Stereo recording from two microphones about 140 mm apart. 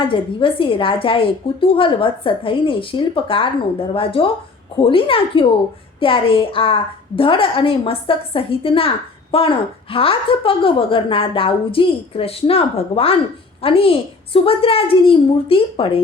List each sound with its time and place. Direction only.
0.0 s a woman's voice: 35° left (ahead or behind)